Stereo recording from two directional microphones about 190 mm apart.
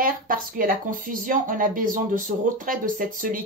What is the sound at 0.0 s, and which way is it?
Speech, 50° right (ahead or behind).